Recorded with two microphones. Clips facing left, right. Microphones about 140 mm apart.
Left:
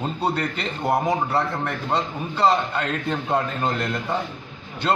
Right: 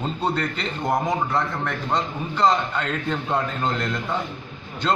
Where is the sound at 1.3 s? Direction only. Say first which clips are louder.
Left 1 dB; 30° left (ahead or behind).